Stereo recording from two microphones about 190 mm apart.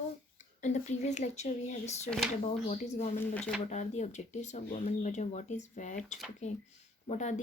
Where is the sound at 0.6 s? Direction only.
40° left (ahead or behind).